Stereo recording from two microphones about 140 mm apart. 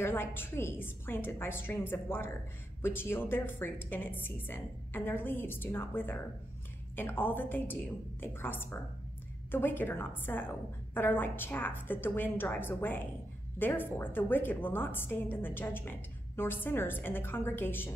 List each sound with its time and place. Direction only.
0.0 s a woman's voice: 15° left (ahead or behind)